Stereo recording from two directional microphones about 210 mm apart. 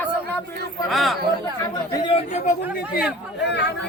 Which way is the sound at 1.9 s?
25° left (ahead or behind).